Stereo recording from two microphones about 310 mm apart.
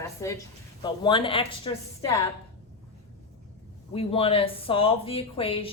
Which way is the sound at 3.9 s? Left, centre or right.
Centre.